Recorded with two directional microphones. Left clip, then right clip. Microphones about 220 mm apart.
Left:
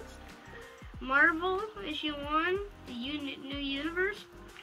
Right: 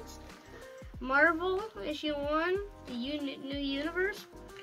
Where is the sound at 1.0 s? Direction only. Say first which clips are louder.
Left 1 dB; 10° right (ahead or behind).